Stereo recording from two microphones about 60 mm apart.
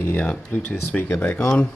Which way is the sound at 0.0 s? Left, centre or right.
Left.